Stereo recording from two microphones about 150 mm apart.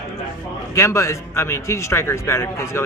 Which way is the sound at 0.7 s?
20° left (ahead or behind).